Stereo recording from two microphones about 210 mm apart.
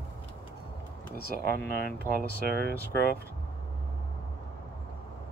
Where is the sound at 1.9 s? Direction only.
50° left (ahead or behind).